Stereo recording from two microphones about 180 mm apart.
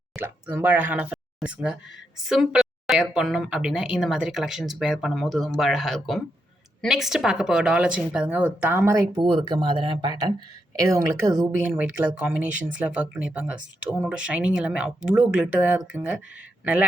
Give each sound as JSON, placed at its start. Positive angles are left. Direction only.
{"t": 0.2, "sound": "a woman's voice", "side_deg": -10}